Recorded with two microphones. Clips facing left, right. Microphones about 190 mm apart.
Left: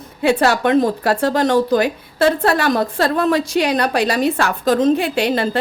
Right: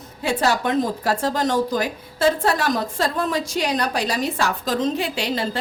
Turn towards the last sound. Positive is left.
turn(degrees=55)  # may be behind; listen again after turning